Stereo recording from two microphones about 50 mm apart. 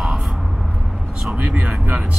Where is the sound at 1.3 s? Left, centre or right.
Right.